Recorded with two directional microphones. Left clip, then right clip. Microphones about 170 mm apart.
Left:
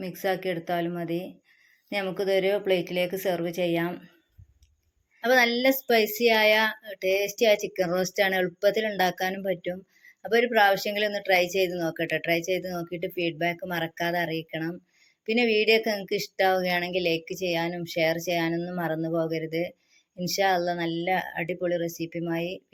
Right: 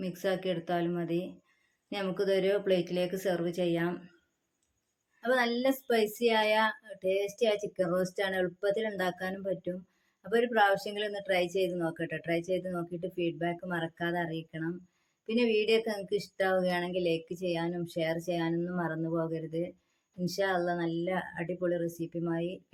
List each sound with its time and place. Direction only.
0.0 s speech: 20° left (ahead or behind)
5.2 s speech: 20° left (ahead or behind)